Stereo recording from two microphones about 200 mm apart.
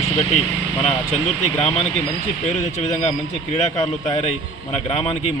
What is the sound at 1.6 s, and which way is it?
A man's voice, 30° left (ahead or behind).